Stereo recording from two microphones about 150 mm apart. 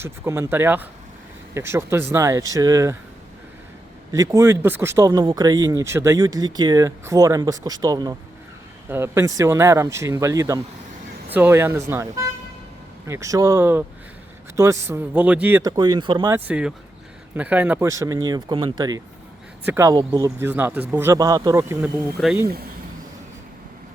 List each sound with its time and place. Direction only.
0.0 s speech: 15° right (ahead or behind)
4.1 s speech: 20° right (ahead or behind)
15.6 s speech: 25° right (ahead or behind)
16.3 s speech: 10° right (ahead or behind)
17.8 s speech: 20° right (ahead or behind)